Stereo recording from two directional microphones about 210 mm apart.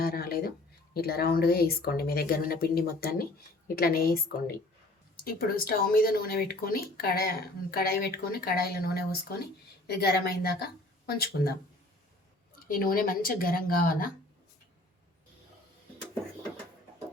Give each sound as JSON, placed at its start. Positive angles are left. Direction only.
{"t": 0.0, "sound": "a sound", "side_deg": 45}
{"t": 0.9, "sound": "speech", "side_deg": 50}
{"t": 5.2, "sound": "speech", "side_deg": 45}
{"t": 12.5, "sound": "speech", "side_deg": 45}